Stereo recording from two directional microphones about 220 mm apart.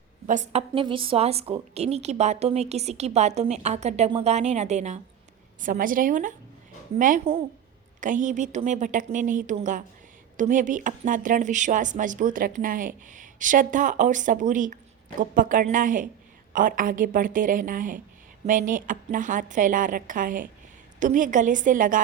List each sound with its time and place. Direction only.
0.3 s a woman's voice: 30° right (ahead or behind)